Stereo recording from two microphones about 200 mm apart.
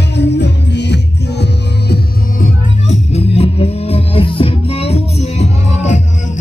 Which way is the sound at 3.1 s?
30° left (ahead or behind).